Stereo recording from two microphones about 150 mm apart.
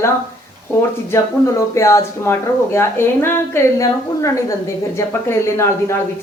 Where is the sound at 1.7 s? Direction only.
20° left (ahead or behind).